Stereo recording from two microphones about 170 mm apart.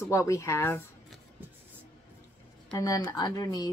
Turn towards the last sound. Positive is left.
turn(degrees=20)  # may be behind; listen again after turning